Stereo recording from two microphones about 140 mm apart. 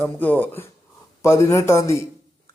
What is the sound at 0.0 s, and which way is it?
Speech, 15° left (ahead or behind).